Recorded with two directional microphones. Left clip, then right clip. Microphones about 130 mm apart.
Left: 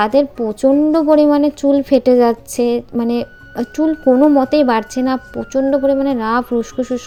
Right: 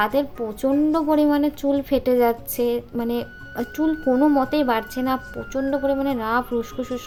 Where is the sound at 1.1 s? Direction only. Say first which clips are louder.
Left 8 dB; 40° left (ahead or behind).